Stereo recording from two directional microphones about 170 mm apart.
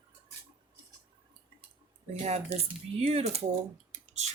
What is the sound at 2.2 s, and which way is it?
Speech, 40° right (ahead or behind).